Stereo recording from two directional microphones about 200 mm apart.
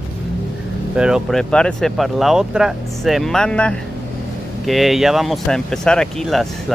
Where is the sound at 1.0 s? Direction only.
5° right (ahead or behind).